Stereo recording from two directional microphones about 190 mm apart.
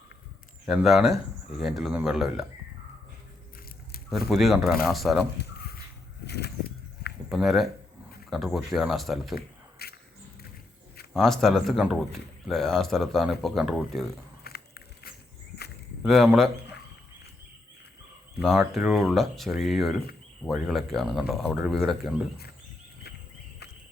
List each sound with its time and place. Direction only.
0.6 s speech: centre (ahead or behind)
4.1 s speech: centre (ahead or behind)
5.4 s a sound: 55° left (ahead or behind)
7.3 s speech: centre (ahead or behind)
9.3 s a sound: 55° left (ahead or behind)
11.1 s speech: centre (ahead or behind)
14.5 s a sound: 55° left (ahead or behind)
16.0 s speech: centre (ahead or behind)
18.6 s speech: centre (ahead or behind)